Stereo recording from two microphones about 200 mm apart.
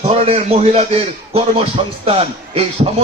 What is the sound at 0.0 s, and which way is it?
A man's voice, 30° right (ahead or behind).